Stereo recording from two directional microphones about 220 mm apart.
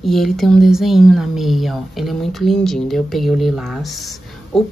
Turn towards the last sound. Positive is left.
turn(degrees=0)  # may be behind; listen again after turning